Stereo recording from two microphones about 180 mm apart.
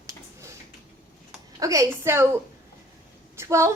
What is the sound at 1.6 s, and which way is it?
Speech, 20° right (ahead or behind).